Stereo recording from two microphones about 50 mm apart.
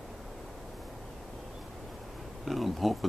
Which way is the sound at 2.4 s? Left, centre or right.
Centre.